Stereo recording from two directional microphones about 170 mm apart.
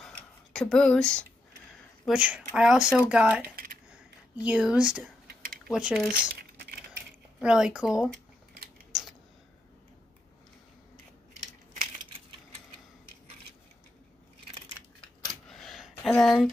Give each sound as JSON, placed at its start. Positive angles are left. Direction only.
{"t": 0.0, "sound": "a sound", "side_deg": 5}
{"t": 2.0, "sound": "speech", "side_deg": -5}
{"t": 3.5, "sound": "computer keyboard", "side_deg": -60}
{"t": 3.9, "sound": "a sound", "side_deg": -5}
{"t": 5.3, "sound": "a sound", "side_deg": -60}
{"t": 5.7, "sound": "speech", "side_deg": -5}
{"t": 7.3, "sound": "speech", "side_deg": -5}
{"t": 8.9, "sound": "typing", "side_deg": -5}
{"t": 15.0, "sound": "scissors", "side_deg": 0}